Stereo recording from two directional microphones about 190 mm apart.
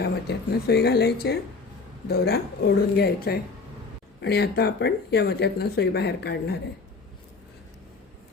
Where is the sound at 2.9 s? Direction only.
55° left (ahead or behind).